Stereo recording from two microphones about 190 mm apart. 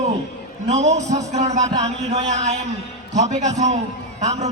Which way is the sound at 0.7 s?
35° right (ahead or behind).